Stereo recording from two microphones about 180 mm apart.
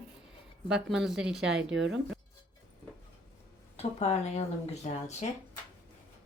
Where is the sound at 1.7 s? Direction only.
90° right.